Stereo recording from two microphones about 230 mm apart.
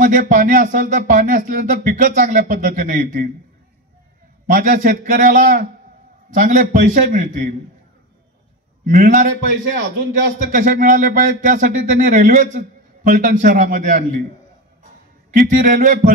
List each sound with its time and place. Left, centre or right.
0.0 s speech: right
4.5 s speech: right
8.9 s speech: right
10.4 s speech: right
15.3 s speech: right